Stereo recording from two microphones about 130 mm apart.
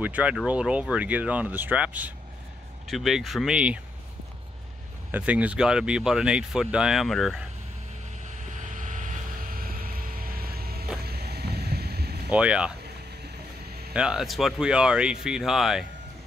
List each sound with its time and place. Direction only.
0.0 s speech: 10° right (ahead or behind)
2.9 s speech: centre (ahead or behind)
5.1 s speech: 10° right (ahead or behind)
8.3 s vehicle: 65° right (ahead or behind); by 10.3 s 90° right
12.3 s speech: 10° right (ahead or behind)
13.9 s speech: 5° right (ahead or behind)